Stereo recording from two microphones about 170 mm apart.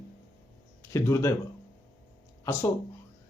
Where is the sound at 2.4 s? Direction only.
15° left (ahead or behind).